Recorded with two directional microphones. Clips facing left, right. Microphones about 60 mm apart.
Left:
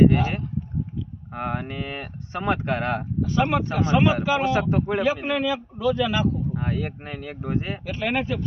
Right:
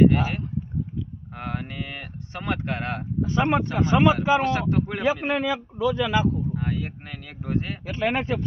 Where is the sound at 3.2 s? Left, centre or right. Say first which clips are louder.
Right 1 dB; right.